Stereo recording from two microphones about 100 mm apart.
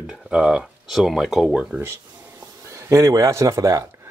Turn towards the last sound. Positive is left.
turn(degrees=-30)  # may be behind; listen again after turning